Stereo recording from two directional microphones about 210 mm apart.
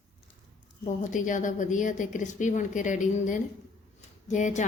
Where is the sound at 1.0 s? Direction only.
35° left (ahead or behind).